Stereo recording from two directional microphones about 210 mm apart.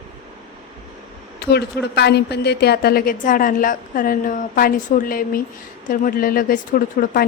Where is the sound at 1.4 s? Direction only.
50° left (ahead or behind).